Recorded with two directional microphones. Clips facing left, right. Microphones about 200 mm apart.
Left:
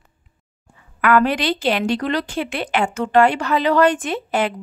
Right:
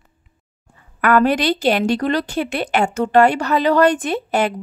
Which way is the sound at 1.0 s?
40° right (ahead or behind).